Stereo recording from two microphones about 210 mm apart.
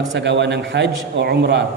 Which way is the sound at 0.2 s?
55° right (ahead or behind).